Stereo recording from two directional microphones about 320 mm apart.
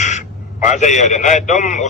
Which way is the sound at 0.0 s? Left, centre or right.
Left.